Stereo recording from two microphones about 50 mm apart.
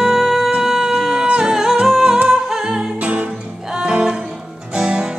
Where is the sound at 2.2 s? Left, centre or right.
Centre.